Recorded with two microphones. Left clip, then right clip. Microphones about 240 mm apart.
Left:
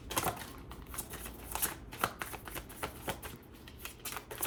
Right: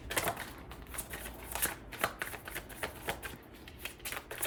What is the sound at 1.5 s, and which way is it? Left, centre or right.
Shuffling cards, centre.